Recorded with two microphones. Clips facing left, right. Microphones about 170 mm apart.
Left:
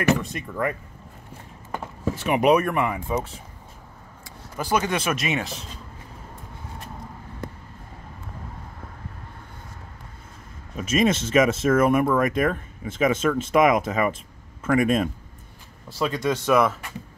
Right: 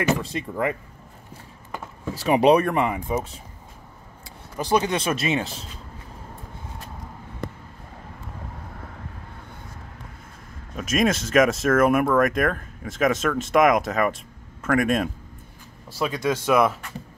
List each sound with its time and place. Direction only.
0.0 s speech: 30° right (ahead or behind)
2.1 s speech: 35° right (ahead or behind)
4.6 s speech: 20° right (ahead or behind)
10.8 s speech: centre (ahead or behind)